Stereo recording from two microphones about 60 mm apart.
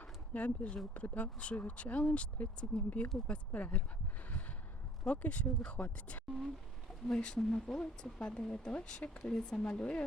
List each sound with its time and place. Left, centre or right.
0.0 s a sound: left
0.9 s speech: left
5.0 s speech: left